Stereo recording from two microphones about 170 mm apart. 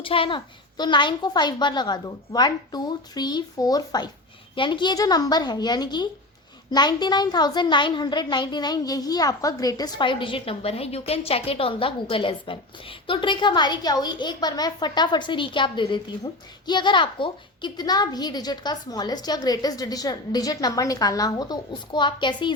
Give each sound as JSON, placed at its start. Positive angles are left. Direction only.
{"t": 0.0, "sound": "a woman's voice", "side_deg": 30}